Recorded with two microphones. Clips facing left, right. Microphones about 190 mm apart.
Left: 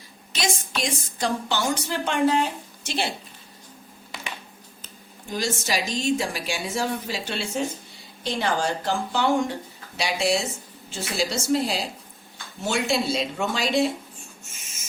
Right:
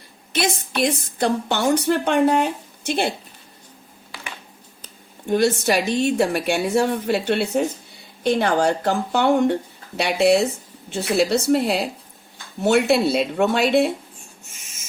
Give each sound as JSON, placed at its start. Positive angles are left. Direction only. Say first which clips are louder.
{"t": 0.3, "sound": "a woman's voice", "louder": "right 6 dB", "side_deg": -60}
{"t": 5.3, "sound": "a woman's voice", "louder": "right 9 dB", "side_deg": -60}